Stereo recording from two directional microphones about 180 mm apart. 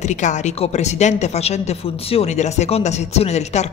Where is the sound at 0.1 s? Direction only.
40° left (ahead or behind).